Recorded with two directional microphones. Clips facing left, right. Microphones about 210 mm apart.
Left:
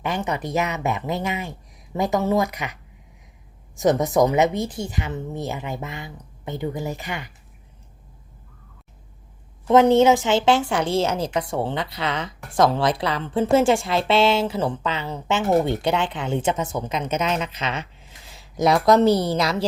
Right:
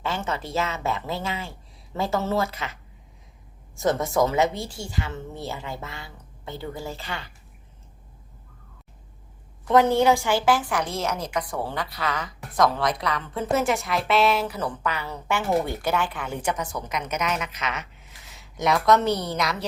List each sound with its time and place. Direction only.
0.0 s speech: 15° left (ahead or behind)
3.8 s speech: 15° left (ahead or behind)
9.6 s speech: 20° left (ahead or behind)